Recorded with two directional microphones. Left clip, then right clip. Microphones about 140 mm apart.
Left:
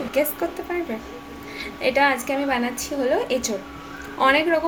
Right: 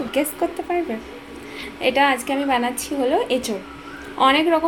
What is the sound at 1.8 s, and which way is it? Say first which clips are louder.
A woman's voice: right 2 dB; 30° right (ahead or behind).